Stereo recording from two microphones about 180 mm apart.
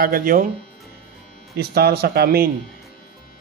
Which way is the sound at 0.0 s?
50° right (ahead or behind).